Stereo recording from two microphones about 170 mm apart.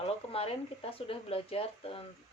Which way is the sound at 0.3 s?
35° left (ahead or behind).